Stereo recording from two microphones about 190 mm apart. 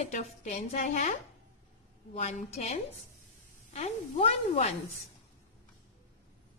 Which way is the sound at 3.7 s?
35° left (ahead or behind).